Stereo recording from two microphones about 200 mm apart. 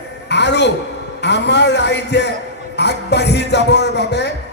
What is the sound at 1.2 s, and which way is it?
A man's voice, 60° left (ahead or behind).